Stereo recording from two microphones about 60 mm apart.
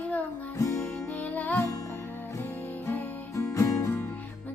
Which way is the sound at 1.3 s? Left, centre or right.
Left.